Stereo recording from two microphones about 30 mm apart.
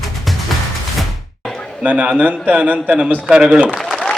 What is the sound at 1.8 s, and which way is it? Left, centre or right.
A man's voice, right.